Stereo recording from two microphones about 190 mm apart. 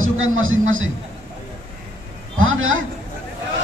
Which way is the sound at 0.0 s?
90° right.